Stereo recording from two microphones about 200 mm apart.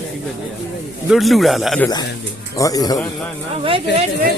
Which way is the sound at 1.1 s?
Centre (ahead or behind).